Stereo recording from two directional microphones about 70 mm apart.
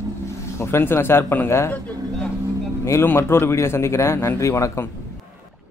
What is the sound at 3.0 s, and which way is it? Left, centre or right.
Speech, left.